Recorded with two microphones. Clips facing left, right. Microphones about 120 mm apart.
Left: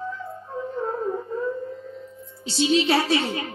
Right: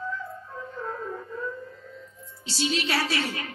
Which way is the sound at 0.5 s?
30° left (ahead or behind).